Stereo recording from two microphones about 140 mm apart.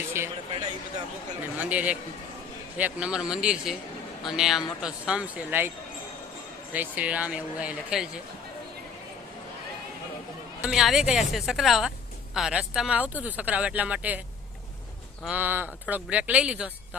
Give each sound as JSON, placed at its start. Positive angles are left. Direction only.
{"t": 0.1, "sound": "speech", "side_deg": -20}
{"t": 1.5, "sound": "speech", "side_deg": -10}
{"t": 6.7, "sound": "speech", "side_deg": -10}
{"t": 10.6, "sound": "a woman's voice", "side_deg": -5}
{"t": 15.2, "sound": "speech", "side_deg": -10}